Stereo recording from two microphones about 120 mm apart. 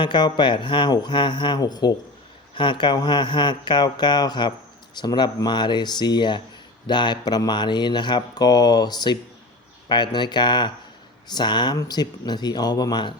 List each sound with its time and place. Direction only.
0.0 s speech: 40° left (ahead or behind)